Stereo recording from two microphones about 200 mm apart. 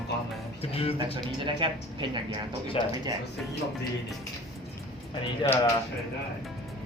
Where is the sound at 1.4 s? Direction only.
25° right (ahead or behind).